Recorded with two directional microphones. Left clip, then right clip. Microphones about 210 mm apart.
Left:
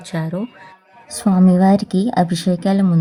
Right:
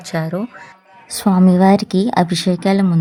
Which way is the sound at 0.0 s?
15° right (ahead or behind).